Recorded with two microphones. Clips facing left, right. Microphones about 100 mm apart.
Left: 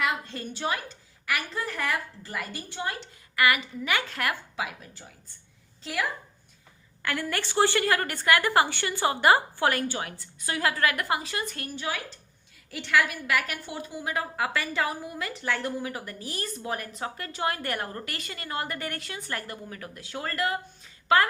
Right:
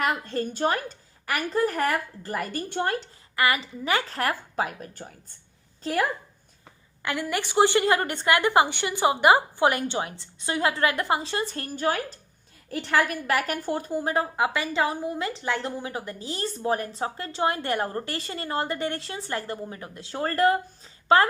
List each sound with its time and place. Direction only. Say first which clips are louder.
0.0 s a woman's voice: right 4 dB; 45° right (ahead or behind)
3.3 s a woman's voice: even; 30° right (ahead or behind)
7.0 s a woman's voice: right 2 dB; 20° right (ahead or behind); by 14.3 s 35° right (ahead or behind)
14.3 s a woman's voice: right 3 dB; 20° right (ahead or behind)